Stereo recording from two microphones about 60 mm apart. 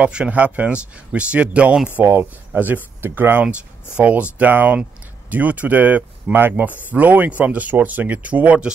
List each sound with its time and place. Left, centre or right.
0.0 s speech: centre
2.0 s speech: right
3.4 s speech: right